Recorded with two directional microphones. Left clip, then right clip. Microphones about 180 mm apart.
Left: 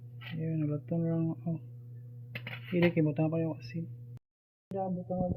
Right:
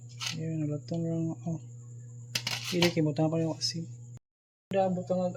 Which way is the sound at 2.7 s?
25° right (ahead or behind).